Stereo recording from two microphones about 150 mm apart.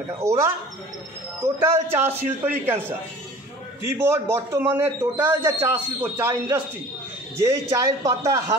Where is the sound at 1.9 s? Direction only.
15° right (ahead or behind).